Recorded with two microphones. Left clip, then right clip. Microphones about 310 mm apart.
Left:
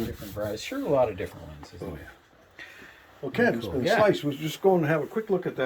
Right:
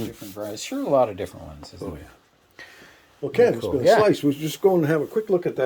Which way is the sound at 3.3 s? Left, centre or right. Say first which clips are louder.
Right 6 dB; right.